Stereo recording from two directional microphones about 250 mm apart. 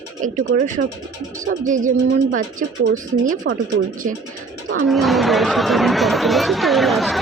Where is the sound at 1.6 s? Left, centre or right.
Right.